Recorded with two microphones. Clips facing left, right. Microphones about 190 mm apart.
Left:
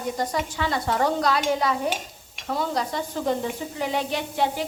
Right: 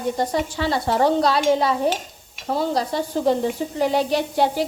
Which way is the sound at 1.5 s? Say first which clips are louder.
Right 5 dB; 30° right (ahead or behind).